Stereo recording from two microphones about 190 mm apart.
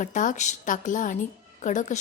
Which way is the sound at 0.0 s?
40° left (ahead or behind).